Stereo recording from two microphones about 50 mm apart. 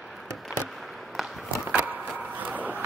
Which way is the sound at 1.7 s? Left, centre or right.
Right.